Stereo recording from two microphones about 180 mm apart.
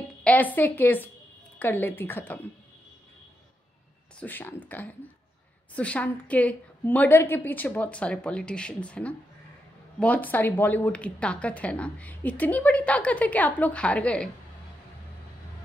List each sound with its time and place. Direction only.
0.2 s a woman's voice: 10° left (ahead or behind)
4.2 s speech: 10° left (ahead or behind)